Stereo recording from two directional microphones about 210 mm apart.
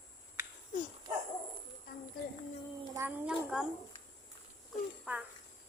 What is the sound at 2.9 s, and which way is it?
Speech, 10° right (ahead or behind).